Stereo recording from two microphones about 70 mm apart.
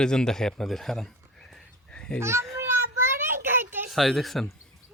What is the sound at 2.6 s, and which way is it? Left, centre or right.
Child singing, right.